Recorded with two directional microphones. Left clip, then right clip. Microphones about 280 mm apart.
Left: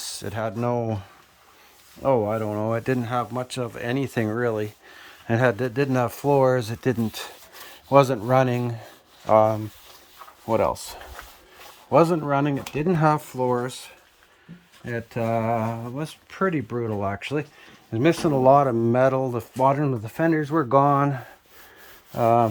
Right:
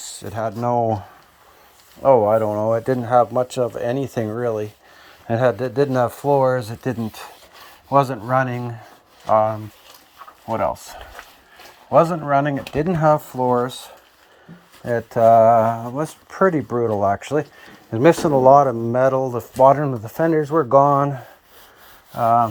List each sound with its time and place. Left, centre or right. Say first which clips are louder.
0.1 s speech: right 5 dB; centre
14.8 s speech: right 13 dB; centre